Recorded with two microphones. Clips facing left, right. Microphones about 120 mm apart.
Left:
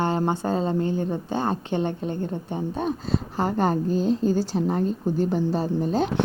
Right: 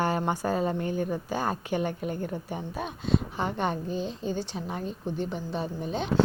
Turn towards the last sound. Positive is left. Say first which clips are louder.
# left 8 dB
turn(degrees=40)  # may be behind; listen again after turning